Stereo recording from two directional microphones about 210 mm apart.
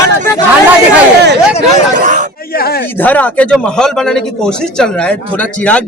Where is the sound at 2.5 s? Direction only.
50° left (ahead or behind).